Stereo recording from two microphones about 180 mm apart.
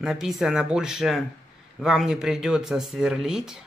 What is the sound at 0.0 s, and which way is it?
Speech, 5° right (ahead or behind).